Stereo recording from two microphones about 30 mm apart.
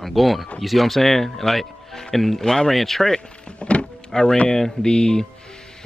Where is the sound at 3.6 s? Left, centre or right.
Left.